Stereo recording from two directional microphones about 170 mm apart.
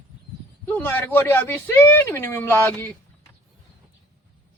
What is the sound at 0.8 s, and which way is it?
Speech, 10° left (ahead or behind).